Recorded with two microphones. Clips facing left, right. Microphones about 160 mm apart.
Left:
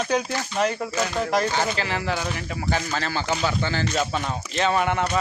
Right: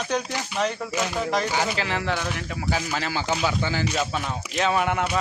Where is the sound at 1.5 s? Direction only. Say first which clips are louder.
Left 1 dB; 10° right (ahead or behind).